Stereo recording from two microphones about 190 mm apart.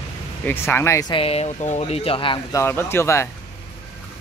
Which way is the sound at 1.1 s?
30° left (ahead or behind).